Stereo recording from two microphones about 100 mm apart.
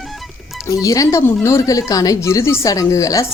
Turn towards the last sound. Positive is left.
turn(degrees=35)  # may be behind; listen again after turning